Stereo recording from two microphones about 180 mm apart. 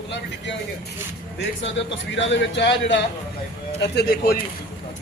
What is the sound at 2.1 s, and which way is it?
Speech, 85° left.